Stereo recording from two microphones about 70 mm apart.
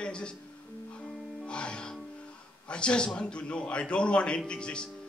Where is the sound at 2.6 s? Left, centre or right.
Centre.